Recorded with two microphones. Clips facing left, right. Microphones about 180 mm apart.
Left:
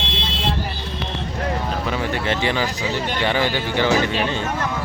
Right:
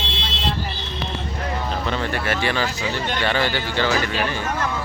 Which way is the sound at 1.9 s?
15° left (ahead or behind).